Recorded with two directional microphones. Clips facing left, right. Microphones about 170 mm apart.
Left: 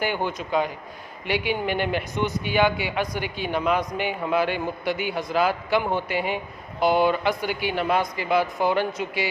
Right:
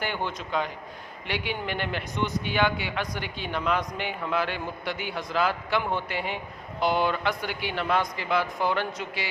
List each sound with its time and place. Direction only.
0.0 s a man's voice: 10° left (ahead or behind)